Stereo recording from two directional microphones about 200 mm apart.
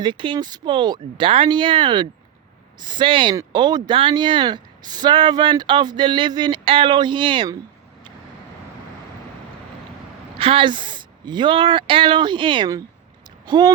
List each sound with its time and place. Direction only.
0.0 s speech: 25° right (ahead or behind)
10.3 s speech: 25° right (ahead or behind)